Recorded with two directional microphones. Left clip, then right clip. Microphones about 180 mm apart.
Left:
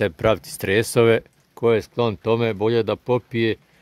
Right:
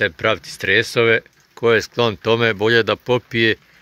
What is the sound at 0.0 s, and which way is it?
Speech, 30° left (ahead or behind).